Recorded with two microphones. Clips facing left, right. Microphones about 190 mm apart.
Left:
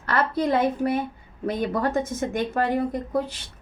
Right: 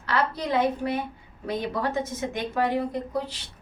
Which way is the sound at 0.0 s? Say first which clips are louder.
Left 3 dB; 50° left (ahead or behind).